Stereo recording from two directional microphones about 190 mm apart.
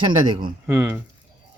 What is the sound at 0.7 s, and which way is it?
Speech, 10° right (ahead or behind).